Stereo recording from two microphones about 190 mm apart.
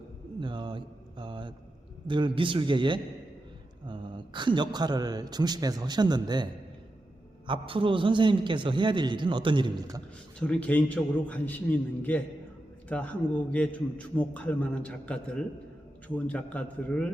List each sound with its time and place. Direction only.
0.3 s mantra: 25° right (ahead or behind)
2.0 s a man's voice: 25° right (ahead or behind)
10.4 s a man's voice: 5° left (ahead or behind)